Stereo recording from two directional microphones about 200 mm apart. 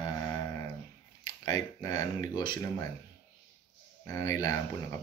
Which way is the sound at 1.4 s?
15° left (ahead or behind).